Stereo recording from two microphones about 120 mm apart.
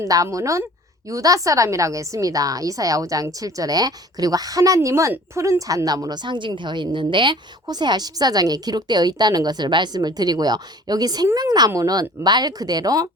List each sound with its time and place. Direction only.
0.0 s a woman's voice: 30° right (ahead or behind)